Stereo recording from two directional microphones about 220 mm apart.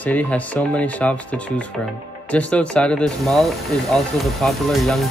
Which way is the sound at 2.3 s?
5° left (ahead or behind).